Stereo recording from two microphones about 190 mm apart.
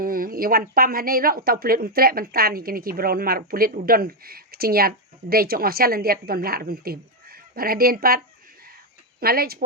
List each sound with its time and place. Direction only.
0.0 s speech: 50° right (ahead or behind)
9.2 s speech: 50° right (ahead or behind)